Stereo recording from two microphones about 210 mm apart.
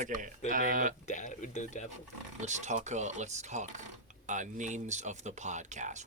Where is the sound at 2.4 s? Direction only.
35° right (ahead or behind).